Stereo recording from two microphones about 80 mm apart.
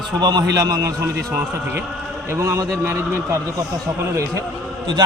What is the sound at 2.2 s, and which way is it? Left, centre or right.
A man's voice, right.